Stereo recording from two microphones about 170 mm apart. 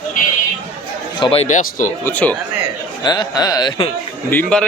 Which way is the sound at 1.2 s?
30° left (ahead or behind).